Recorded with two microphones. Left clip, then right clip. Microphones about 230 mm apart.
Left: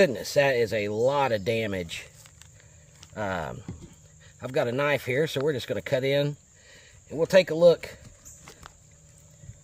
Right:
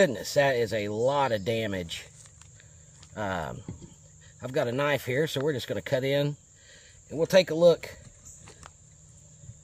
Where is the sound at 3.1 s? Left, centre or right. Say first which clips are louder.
Left 1 dB; centre.